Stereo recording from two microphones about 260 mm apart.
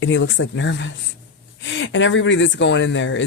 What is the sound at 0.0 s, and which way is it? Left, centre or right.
Speech, left.